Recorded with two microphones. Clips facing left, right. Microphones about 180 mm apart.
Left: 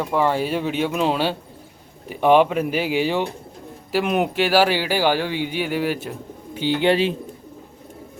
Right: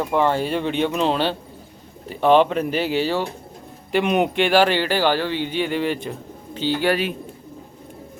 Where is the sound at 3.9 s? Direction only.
Centre (ahead or behind); by 7.1 s 25° left (ahead or behind).